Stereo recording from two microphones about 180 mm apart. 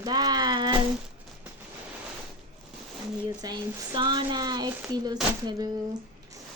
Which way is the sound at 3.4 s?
25° right (ahead or behind).